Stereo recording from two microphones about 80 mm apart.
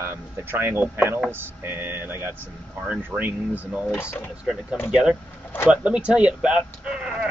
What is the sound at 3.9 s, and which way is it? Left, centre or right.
Speech, left.